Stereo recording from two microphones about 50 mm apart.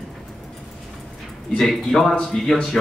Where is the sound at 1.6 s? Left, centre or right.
Centre.